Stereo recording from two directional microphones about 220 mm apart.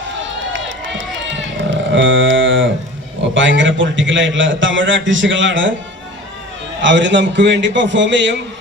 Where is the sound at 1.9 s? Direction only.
60° right (ahead or behind).